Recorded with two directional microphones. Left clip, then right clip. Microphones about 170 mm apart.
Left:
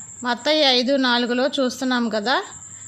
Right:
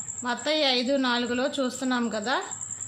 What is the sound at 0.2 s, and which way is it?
A woman's voice, 40° left (ahead or behind).